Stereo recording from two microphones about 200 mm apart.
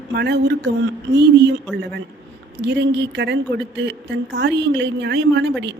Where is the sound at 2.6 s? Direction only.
60° right (ahead or behind).